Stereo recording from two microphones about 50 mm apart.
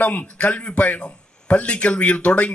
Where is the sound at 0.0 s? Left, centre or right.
Left.